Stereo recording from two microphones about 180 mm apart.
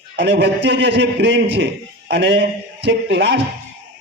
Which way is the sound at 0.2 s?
65° right (ahead or behind).